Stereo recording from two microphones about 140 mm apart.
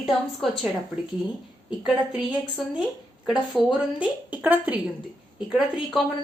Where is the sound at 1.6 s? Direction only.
10° right (ahead or behind).